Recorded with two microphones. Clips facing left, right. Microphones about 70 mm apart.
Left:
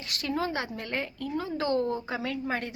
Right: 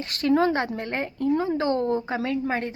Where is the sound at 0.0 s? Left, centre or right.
Right.